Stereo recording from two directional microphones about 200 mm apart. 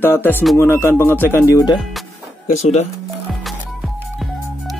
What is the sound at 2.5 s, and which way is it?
Speech, 30° left (ahead or behind).